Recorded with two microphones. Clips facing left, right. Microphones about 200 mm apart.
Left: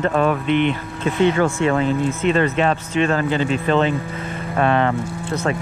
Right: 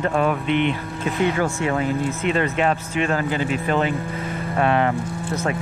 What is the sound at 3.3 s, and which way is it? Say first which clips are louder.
Speech: left 3 dB; 25° left (ahead or behind).